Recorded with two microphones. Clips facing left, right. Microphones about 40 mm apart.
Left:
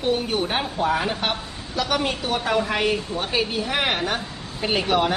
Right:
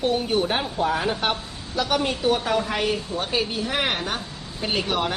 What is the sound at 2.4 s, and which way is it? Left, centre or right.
Speech, centre.